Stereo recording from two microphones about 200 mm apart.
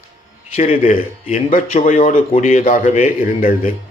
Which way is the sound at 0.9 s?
30° left (ahead or behind).